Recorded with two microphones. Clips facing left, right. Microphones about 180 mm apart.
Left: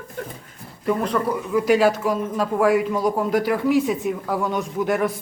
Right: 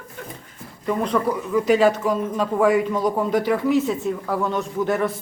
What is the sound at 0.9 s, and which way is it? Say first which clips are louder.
Speech: even; 5° left (ahead or behind).